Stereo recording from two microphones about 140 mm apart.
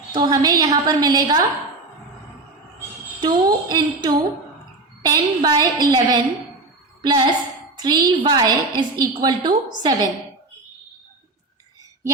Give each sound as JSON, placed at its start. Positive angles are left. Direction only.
{"t": 0.1, "sound": "a woman's voice", "side_deg": -30}
{"t": 3.2, "sound": "a woman's voice", "side_deg": -30}